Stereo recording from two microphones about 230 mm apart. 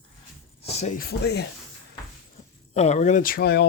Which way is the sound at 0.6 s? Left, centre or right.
Left.